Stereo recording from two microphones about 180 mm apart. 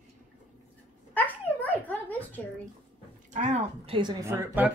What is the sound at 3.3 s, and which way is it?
Speech, 40° right (ahead or behind).